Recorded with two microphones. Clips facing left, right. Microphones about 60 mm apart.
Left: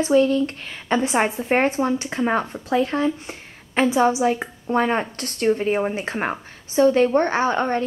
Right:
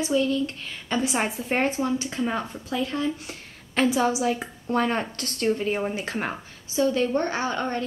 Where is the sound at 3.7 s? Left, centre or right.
Left.